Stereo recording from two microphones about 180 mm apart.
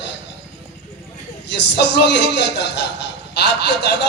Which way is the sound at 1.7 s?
70° left (ahead or behind).